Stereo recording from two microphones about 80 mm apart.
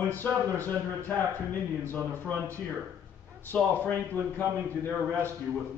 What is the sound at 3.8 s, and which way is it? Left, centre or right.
Speech, left.